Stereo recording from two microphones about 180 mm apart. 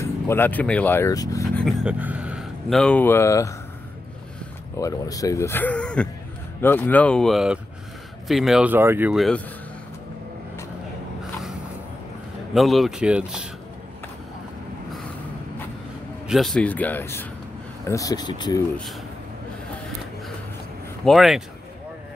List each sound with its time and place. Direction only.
0.0 s speech: 10° left (ahead or behind)
1.6 s speech: centre (ahead or behind); by 3.5 s 15° left (ahead or behind)
4.7 s speech: 20° left (ahead or behind); by 9.2 s 10° right (ahead or behind)
12.5 s speech: centre (ahead or behind)
16.3 s speech: centre (ahead or behind); by 18.6 s 25° left (ahead or behind)
21.0 s speech: centre (ahead or behind)